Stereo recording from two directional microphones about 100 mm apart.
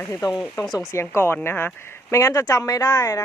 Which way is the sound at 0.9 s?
25° left (ahead or behind).